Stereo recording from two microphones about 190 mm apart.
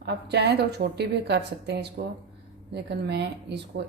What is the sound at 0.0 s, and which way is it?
A woman's voice, 65° right (ahead or behind).